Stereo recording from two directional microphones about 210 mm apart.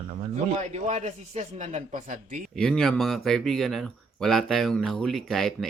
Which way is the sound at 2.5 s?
Centre (ahead or behind).